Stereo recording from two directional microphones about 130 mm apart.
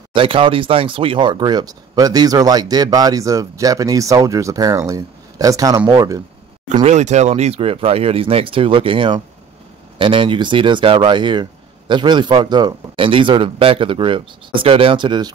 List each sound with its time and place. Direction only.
0.1 s speech: 40° right (ahead or behind)
6.7 s speech: 65° right (ahead or behind); by 15.3 s 35° right (ahead or behind)